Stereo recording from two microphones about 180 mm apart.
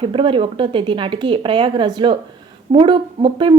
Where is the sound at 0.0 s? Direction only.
30° right (ahead or behind).